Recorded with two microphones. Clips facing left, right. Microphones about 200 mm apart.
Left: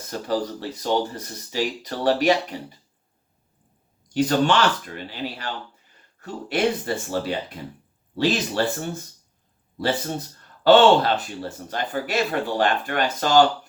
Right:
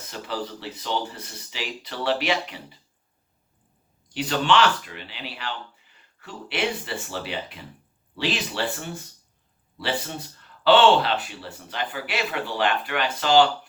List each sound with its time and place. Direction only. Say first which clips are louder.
0.1 s speech: left 6 dB; 45° left (ahead or behind)
4.1 s speech: left 3 dB; 45° left (ahead or behind)